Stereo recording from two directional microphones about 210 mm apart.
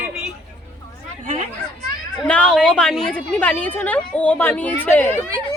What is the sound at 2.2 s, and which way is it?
A woman's voice, 5° left (ahead or behind).